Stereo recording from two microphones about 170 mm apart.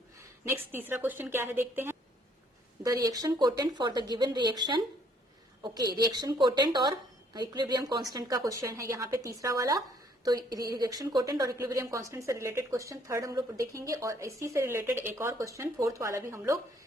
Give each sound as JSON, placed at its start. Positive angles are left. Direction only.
{"t": 0.4, "sound": "a woman's voice", "side_deg": -10}